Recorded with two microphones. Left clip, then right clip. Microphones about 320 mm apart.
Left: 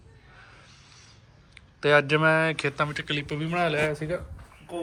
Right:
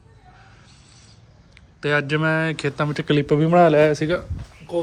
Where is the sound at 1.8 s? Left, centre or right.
Centre; by 4.0 s right.